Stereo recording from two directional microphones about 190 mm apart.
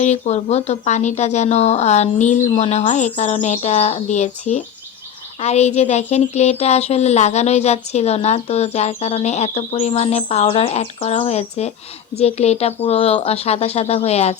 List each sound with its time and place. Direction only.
0.0 s speech: 35° left (ahead or behind)